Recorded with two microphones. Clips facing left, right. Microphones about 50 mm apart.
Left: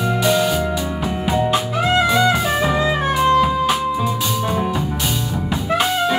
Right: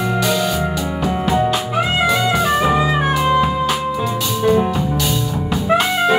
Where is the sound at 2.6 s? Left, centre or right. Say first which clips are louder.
Right 2 dB; centre.